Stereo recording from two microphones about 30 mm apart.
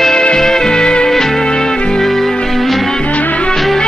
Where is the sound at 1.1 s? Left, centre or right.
Centre.